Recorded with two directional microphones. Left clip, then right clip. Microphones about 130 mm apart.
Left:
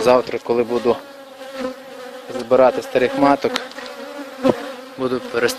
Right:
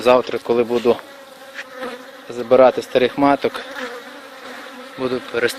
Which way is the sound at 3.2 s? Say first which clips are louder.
Even; 5° right (ahead or behind).